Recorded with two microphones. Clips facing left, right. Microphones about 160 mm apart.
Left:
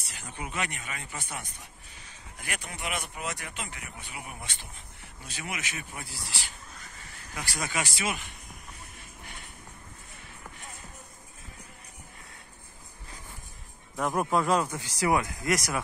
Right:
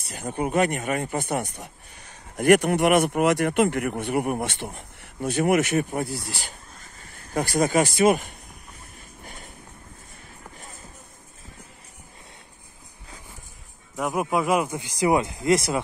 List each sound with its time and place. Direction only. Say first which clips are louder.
0.1 s speech: right 13 dB; 50° right (ahead or behind)
9.2 s a sound: right 5 dB; 40° right (ahead or behind)
10.6 s music: right 2 dB; 40° right (ahead or behind)
13.9 s speech: right 2 dB; 5° right (ahead or behind); by 15.8 s 25° right (ahead or behind)